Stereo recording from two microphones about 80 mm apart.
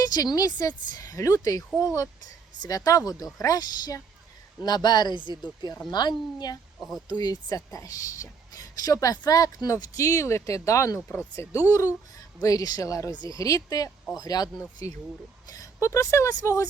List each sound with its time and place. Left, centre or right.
0.0 s a woman's voice: left
2.6 s a woman's voice: left
6.7 s speech: centre
7.1 s a woman's voice: left
13.1 s speech: right
13.4 s a woman's voice: left
14.8 s a woman's voice: left